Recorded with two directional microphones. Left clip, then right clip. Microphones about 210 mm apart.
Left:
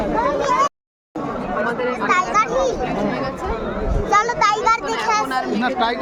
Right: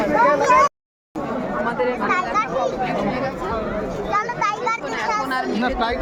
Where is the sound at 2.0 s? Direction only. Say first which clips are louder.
Left 7 dB; 55° left (ahead or behind).